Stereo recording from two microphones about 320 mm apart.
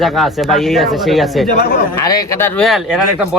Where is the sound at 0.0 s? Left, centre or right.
Centre.